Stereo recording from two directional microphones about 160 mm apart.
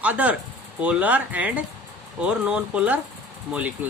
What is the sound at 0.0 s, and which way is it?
Speech, 10° right (ahead or behind).